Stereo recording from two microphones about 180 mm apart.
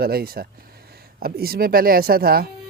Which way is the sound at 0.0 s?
60° right (ahead or behind).